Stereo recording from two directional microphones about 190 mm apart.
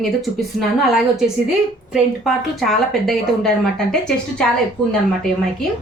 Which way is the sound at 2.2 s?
Centre (ahead or behind).